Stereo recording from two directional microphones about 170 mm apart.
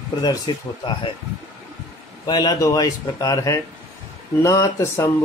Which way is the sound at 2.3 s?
25° left (ahead or behind).